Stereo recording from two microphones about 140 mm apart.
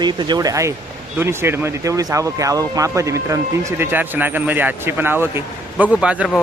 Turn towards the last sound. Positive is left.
turn(degrees=-10)  # may be behind; listen again after turning